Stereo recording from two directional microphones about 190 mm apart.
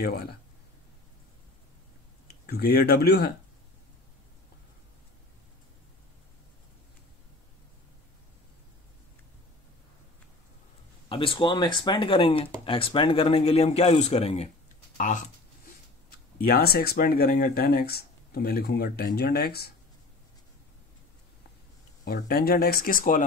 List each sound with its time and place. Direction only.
0.0 s speech: 55° left (ahead or behind)
2.2 s speech: 55° left (ahead or behind)
11.1 s speech: 25° left (ahead or behind)
15.0 s a sound: 40° left (ahead or behind)
16.3 s speech: 50° left (ahead or behind)
22.0 s speech: 55° left (ahead or behind)